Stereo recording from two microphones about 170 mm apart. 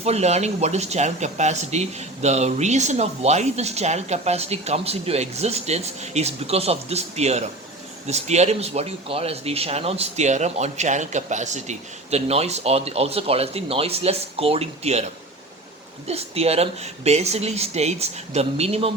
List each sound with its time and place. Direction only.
0.0 s speech: 40° right (ahead or behind)